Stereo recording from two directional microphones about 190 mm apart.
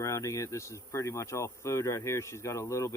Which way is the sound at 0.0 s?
15° left (ahead or behind).